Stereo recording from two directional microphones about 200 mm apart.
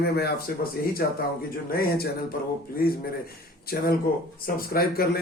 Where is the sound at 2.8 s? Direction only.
45° left (ahead or behind).